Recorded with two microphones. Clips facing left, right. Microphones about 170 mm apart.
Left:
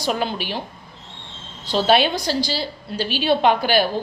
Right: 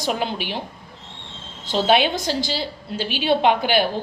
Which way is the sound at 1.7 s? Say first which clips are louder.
Left 1 dB; 15° right (ahead or behind).